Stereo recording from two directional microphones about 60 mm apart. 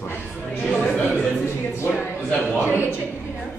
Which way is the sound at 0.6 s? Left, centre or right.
Centre.